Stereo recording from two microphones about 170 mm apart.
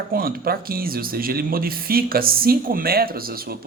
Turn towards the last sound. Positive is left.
turn(degrees=-60)  # may be behind; listen again after turning